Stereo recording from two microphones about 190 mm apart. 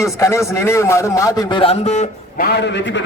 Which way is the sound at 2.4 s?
65° left (ahead or behind).